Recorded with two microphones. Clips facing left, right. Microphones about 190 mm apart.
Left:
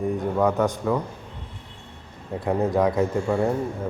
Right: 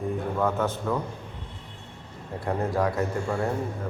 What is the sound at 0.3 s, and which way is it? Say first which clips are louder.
Speech: left 5 dB; 15° left (ahead or behind).